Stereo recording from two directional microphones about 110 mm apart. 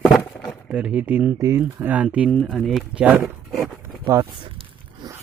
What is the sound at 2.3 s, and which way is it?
Speech, centre (ahead or behind).